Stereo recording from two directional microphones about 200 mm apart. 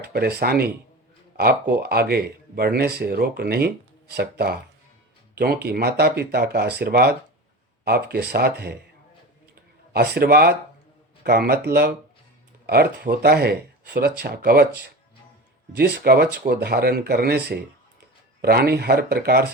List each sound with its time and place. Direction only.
0.0 s speech: 50° right (ahead or behind)
9.9 s speech: 55° right (ahead or behind)